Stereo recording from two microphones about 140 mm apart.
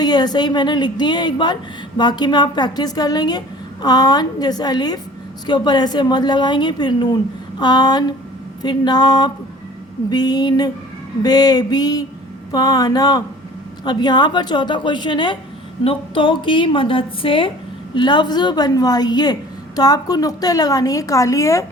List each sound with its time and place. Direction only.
0.0 s a woman's voice: 30° left (ahead or behind)